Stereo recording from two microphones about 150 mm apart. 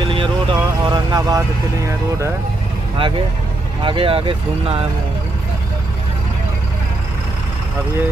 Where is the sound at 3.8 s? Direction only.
35° right (ahead or behind).